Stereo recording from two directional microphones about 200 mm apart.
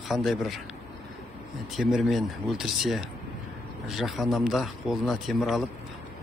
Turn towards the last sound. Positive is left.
turn(degrees=0)  # may be behind; listen again after turning